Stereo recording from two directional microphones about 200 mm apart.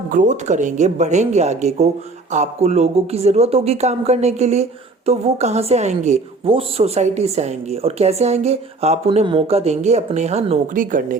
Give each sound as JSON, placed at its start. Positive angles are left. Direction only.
{"t": 0.1, "sound": "speech", "side_deg": -40}